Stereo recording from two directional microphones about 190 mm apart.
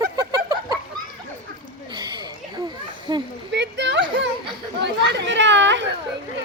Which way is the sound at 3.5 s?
70° right (ahead or behind).